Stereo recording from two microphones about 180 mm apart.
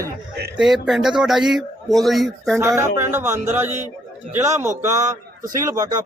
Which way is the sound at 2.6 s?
15° right (ahead or behind).